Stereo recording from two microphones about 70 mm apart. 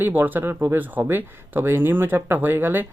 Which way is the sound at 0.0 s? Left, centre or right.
Right.